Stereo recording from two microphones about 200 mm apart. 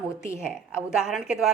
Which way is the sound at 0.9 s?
5° right (ahead or behind).